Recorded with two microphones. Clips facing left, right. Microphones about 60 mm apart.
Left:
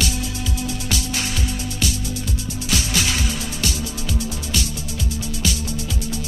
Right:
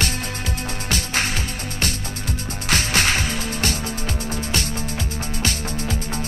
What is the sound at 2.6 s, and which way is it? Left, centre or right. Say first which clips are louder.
Music: right 3 dB; right.